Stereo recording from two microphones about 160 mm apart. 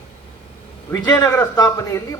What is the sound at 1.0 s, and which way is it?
A man's voice, 25° left (ahead or behind).